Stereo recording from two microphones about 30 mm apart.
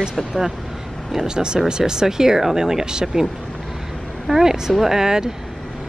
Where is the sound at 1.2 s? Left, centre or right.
Right; by 4.9 s centre.